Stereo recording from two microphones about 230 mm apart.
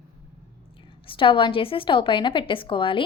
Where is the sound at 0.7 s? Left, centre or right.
Left.